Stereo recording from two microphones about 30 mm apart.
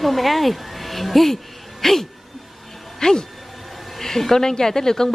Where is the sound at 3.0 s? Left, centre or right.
Left.